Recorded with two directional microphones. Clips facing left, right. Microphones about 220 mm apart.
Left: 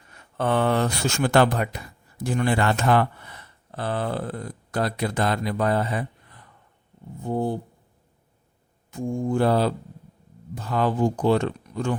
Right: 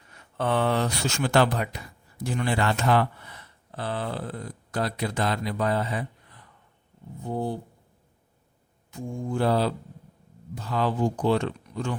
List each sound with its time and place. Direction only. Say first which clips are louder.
0.3 s speech: left 3 dB; 50° left (ahead or behind)
7.3 s speech: left 4 dB; 50° left (ahead or behind)
8.9 s speech: left 6 dB; 50° left (ahead or behind)